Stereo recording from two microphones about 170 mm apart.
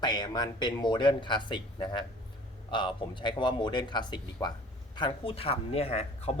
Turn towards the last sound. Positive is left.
turn(degrees=40)  # may be behind; listen again after turning